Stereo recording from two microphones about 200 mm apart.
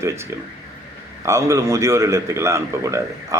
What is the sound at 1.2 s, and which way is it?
A man's voice, 15° right (ahead or behind).